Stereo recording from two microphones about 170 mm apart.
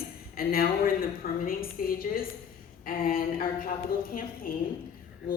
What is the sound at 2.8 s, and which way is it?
A woman's voice, 55° left (ahead or behind).